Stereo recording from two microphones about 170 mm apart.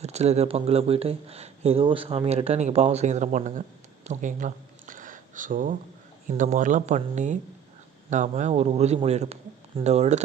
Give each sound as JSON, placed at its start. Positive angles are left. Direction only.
{"t": 0.0, "sound": "speech", "side_deg": -40}
{"t": 4.0, "sound": "a sound", "side_deg": -45}
{"t": 6.2, "sound": "speech", "side_deg": -50}